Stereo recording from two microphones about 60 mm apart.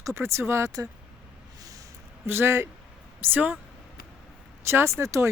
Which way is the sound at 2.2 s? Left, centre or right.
Right.